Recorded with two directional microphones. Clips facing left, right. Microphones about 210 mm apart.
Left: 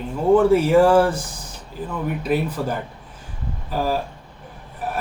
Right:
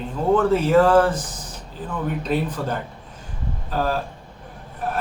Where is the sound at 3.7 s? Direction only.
10° left (ahead or behind).